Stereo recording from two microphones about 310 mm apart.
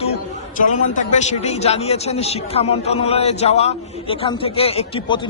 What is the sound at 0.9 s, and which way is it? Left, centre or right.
A man's voice, left.